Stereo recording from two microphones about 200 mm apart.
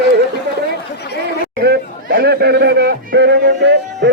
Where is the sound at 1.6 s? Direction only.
55° right (ahead or behind).